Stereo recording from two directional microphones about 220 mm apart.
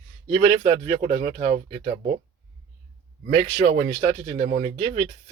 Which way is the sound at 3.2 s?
30° right (ahead or behind).